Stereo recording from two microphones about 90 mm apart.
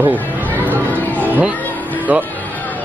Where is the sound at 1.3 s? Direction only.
20° right (ahead or behind).